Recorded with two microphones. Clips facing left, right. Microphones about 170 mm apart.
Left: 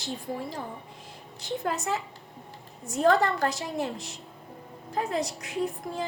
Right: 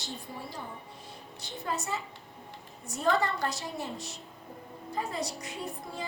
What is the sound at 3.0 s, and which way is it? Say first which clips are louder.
A woman's voice: left 6 dB; 70° left (ahead or behind).